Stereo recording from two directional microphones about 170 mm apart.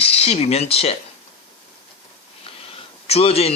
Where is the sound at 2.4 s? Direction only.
35° left (ahead or behind).